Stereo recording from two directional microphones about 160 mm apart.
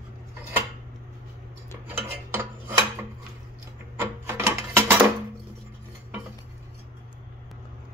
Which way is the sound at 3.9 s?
15° right (ahead or behind).